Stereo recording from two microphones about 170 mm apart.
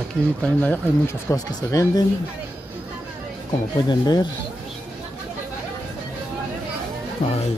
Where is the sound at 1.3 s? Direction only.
20° left (ahead or behind).